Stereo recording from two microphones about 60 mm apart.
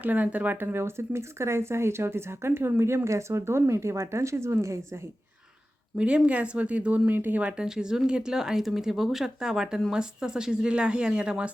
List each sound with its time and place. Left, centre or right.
0.0 s speech: right
0.6 s speech: right
6.0 s speech: centre
7.1 s speech: right
7.4 s speech: centre